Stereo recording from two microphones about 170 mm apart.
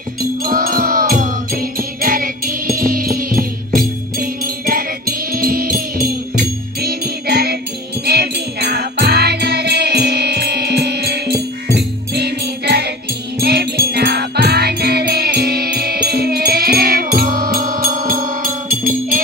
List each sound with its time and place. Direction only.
0.4 s music: 55° right (ahead or behind)